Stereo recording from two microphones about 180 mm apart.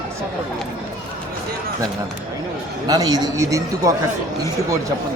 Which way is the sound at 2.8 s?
20° right (ahead or behind).